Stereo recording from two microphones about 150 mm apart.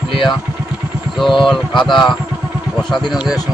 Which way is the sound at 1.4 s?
Centre (ahead or behind).